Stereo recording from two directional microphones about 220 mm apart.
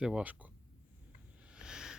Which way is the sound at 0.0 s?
5° right (ahead or behind).